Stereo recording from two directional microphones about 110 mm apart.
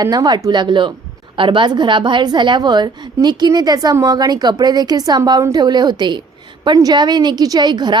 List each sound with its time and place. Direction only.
0.0 s a woman's voice: 35° right (ahead or behind)